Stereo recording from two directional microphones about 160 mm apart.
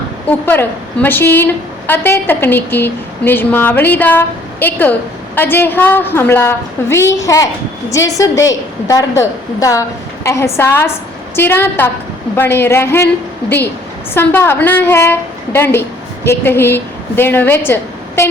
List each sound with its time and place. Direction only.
0.3 s a woman's voice: 10° left (ahead or behind)
14.1 s a woman's voice: 15° left (ahead or behind)